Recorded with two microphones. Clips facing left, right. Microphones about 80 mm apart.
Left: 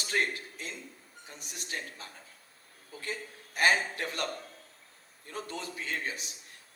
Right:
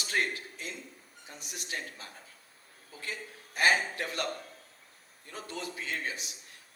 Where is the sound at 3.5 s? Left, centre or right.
Left.